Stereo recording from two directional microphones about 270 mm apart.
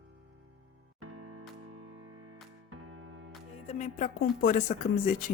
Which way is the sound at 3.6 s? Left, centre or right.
Left.